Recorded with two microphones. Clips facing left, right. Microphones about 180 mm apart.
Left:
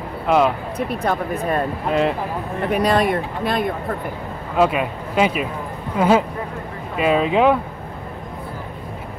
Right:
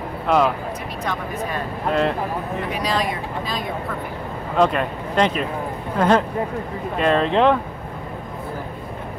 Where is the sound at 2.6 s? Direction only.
55° left (ahead or behind).